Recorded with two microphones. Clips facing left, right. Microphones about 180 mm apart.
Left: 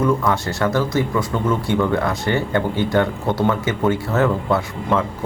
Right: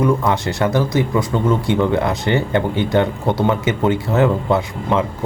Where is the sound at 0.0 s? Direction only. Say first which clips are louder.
Right 2 dB; 20° right (ahead or behind).